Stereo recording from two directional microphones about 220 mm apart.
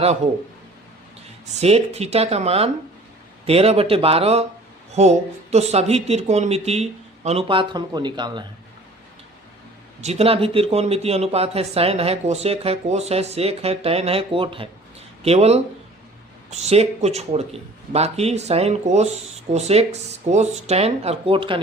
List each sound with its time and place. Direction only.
1.5 s speech: 30° right (ahead or behind)
10.0 s speech: 30° right (ahead or behind)